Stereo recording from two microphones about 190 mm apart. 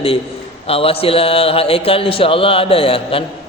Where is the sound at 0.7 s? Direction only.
30° left (ahead or behind).